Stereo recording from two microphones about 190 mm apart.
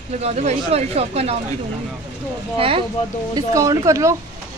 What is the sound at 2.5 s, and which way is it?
Speech, 30° right (ahead or behind).